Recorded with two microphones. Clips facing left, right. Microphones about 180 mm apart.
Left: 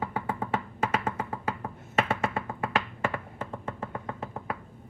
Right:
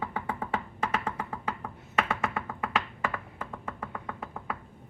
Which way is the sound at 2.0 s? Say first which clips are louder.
Left 2 dB; 25° left (ahead or behind).